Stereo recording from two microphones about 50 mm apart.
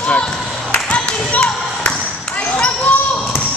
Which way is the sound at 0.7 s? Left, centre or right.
Left.